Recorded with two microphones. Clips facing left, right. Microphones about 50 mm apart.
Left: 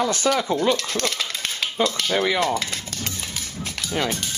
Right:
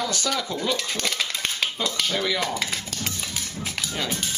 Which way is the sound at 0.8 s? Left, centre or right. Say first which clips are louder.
Left 2 dB; centre.